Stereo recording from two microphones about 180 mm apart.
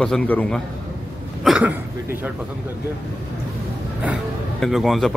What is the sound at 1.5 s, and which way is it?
Speech, 5° right (ahead or behind).